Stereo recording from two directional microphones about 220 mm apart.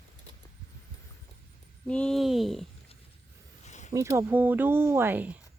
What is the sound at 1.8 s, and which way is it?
Speech, 5° left (ahead or behind).